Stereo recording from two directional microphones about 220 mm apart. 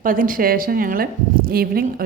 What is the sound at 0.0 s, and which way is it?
A woman's voice, 40° right (ahead or behind).